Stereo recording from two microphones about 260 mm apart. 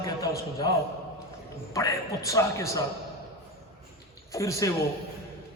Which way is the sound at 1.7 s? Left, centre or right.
Centre.